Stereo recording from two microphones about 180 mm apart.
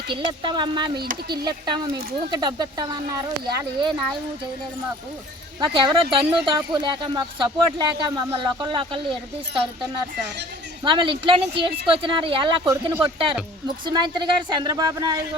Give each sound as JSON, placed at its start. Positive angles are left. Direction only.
{"t": 0.1, "sound": "speech", "side_deg": -25}
{"t": 5.5, "sound": "speech", "side_deg": -25}
{"t": 10.8, "sound": "speech", "side_deg": -25}
{"t": 13.8, "sound": "speech", "side_deg": -25}